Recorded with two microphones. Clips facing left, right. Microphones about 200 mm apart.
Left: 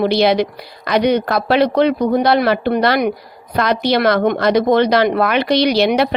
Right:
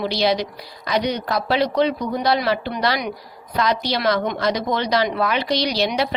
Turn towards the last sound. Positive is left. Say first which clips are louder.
# left 7 dB
turn(degrees=60)  # may be behind; listen again after turning